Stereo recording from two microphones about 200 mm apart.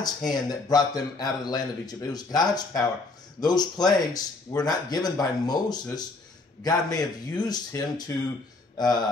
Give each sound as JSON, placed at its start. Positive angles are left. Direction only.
{"t": 0.3, "sound": "a man's voice", "side_deg": 20}